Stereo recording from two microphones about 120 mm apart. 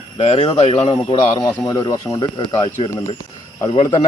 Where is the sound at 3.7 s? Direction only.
40° left (ahead or behind).